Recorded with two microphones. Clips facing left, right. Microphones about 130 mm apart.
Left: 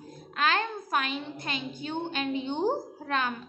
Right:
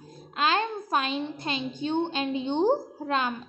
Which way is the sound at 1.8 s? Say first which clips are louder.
Right 5 dB; 20° right (ahead or behind).